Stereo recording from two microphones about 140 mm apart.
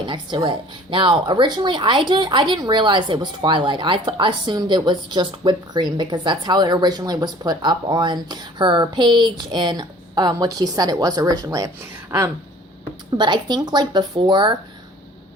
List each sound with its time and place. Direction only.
0.0 s speech: 35° right (ahead or behind)
13.1 s speech: 35° right (ahead or behind)